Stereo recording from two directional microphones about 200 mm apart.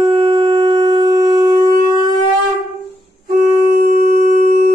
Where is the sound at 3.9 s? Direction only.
45° right (ahead or behind).